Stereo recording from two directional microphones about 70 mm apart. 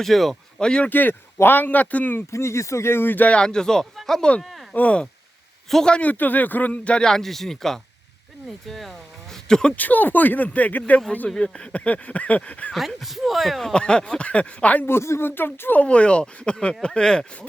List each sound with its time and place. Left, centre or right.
0.0 s speech: centre
0.6 s a man's voice: centre
0.9 s speech: left
2.3 s speech: left
3.4 s a man's voice: centre
4.7 s speech: centre
5.6 s a man's voice: centre
9.7 s speech: left
11.3 s speech: centre
13.0 s speech: centre
13.7 s a man's voice: centre
14.8 s speech: left
15.8 s a man's voice: centre